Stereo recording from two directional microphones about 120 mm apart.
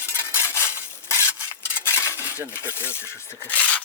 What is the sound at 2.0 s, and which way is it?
Cutlery, 25° left (ahead or behind).